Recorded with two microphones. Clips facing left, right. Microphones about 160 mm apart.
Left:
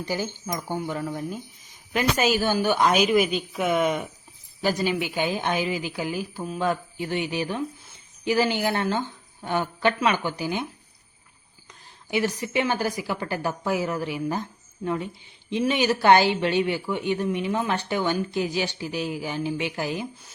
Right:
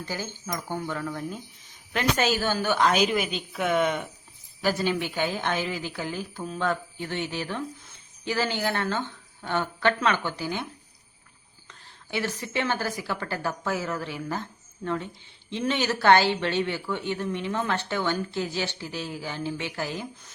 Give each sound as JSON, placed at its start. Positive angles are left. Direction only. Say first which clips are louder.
{"t": 0.0, "sound": "a woman's voice", "louder": "left 5 dB", "side_deg": 15}
{"t": 11.7, "sound": "a woman's voice", "louder": "left 5 dB", "side_deg": 15}